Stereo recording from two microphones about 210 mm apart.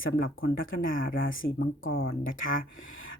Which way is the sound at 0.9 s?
45° left (ahead or behind).